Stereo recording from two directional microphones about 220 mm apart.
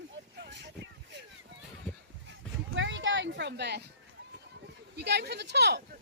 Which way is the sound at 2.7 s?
60° right (ahead or behind).